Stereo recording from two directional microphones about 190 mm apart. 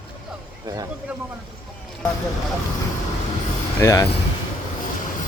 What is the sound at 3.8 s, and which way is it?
Speech, 15° left (ahead or behind).